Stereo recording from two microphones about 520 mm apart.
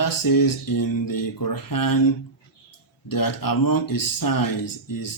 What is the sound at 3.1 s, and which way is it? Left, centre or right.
Speech, left.